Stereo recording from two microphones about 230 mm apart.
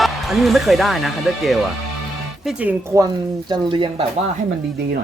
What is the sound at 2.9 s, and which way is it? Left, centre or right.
Speech, centre.